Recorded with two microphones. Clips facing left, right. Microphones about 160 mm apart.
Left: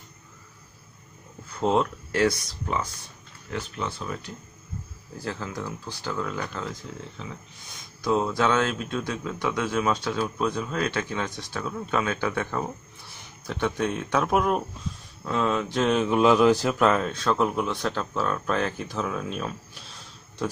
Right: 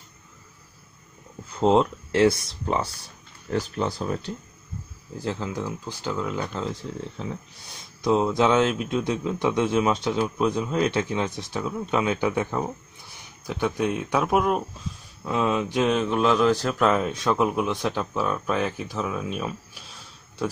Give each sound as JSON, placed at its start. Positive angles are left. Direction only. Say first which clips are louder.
{"t": 1.6, "sound": "speech", "louder": "right 4 dB", "side_deg": -25}
{"t": 5.2, "sound": "speech", "louder": "right 4 dB", "side_deg": -20}
{"t": 8.0, "sound": "speech", "louder": "right 3 dB", "side_deg": -20}
{"t": 15.9, "sound": "speech", "louder": "left 4 dB", "side_deg": 5}
{"t": 17.0, "sound": "speech", "louder": "right 1 dB", "side_deg": -15}